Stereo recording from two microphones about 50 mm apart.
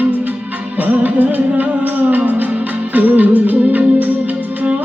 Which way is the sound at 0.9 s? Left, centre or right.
Right.